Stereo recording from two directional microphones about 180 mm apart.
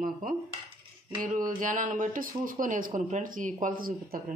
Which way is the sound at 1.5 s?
45° right (ahead or behind).